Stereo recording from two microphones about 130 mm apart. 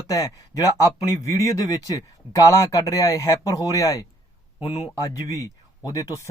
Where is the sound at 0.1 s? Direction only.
25° left (ahead or behind).